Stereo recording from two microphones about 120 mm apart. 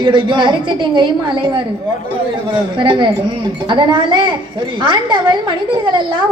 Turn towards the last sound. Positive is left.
turn(degrees=-40)  # may be behind; listen again after turning